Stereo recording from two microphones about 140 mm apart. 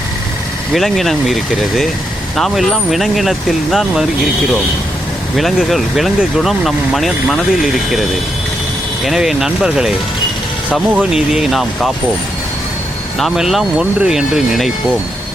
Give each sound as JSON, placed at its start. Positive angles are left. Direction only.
{"t": 0.7, "sound": "speech", "side_deg": 0}
{"t": 5.4, "sound": "speech", "side_deg": 0}
{"t": 9.0, "sound": "speech", "side_deg": -5}
{"t": 13.1, "sound": "speech", "side_deg": 0}